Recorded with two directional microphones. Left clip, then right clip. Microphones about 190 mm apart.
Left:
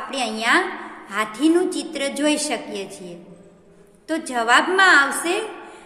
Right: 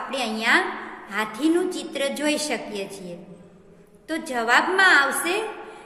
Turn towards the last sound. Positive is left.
turn(degrees=15)  # may be behind; listen again after turning